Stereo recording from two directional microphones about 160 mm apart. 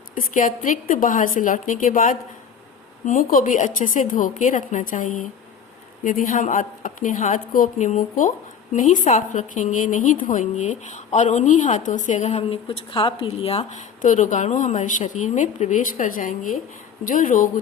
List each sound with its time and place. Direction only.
0.1 s a woman's voice: 55° left (ahead or behind)